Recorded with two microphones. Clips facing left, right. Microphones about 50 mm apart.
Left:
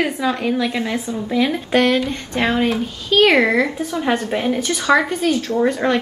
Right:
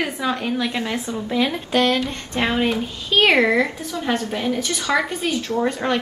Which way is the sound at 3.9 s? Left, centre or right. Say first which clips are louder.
Left 3 dB; left.